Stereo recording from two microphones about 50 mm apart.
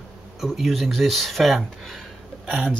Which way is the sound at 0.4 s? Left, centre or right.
Centre.